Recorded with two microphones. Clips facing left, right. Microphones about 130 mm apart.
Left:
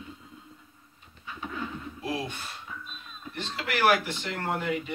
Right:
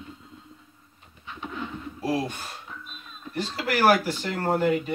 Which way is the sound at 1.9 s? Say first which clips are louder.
Right 7 dB; 40° right (ahead or behind).